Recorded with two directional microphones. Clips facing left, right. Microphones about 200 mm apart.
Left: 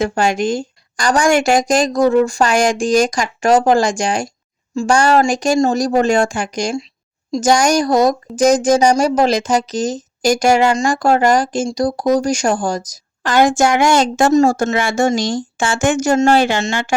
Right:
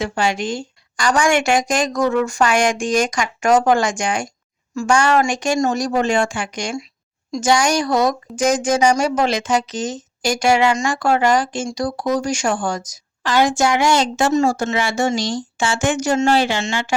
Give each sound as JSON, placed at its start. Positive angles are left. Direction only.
{"t": 0.0, "sound": "a woman's voice", "side_deg": 45}